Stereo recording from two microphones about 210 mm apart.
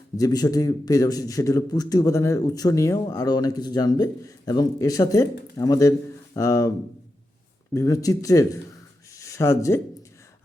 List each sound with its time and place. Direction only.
0.2 s a man's voice: 15° left (ahead or behind)
7.7 s a man's voice: 15° left (ahead or behind)